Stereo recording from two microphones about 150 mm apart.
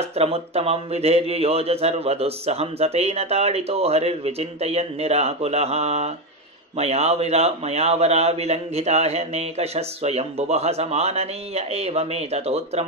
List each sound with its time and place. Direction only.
0.0 s speech: 45° right (ahead or behind)